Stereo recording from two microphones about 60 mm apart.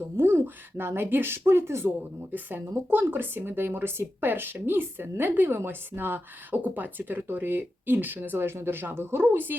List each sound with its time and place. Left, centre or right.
0.2 s speech: right
2.3 s speech: right